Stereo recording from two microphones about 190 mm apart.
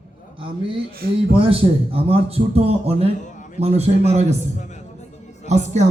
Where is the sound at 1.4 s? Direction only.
30° right (ahead or behind).